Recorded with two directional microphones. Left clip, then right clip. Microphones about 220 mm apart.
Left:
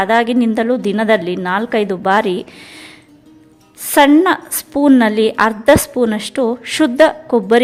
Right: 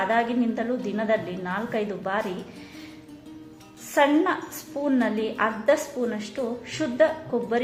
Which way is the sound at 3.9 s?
50° left (ahead or behind).